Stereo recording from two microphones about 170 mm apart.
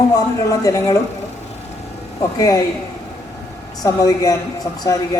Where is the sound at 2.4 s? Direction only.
20° left (ahead or behind).